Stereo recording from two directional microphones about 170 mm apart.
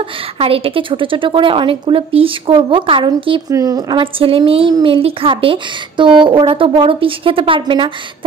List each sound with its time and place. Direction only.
0.4 s a woman's voice: 35° right (ahead or behind)